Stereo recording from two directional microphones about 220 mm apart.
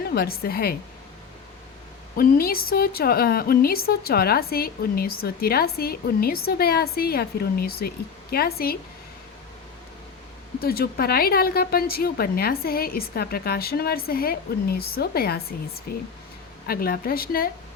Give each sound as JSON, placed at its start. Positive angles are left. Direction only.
{"t": 0.1, "sound": "a woman's voice", "side_deg": 45}
{"t": 2.1, "sound": "a woman's voice", "side_deg": 45}
{"t": 10.6, "sound": "a woman's voice", "side_deg": 45}